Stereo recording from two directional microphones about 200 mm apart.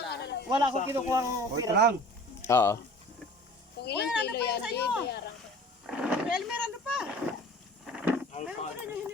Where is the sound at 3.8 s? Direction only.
55° left (ahead or behind).